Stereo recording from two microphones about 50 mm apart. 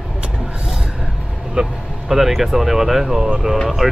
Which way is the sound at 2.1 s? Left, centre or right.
Centre.